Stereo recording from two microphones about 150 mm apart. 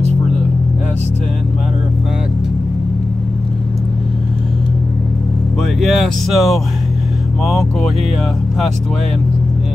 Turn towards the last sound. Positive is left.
turn(degrees=0)  # may be behind; listen again after turning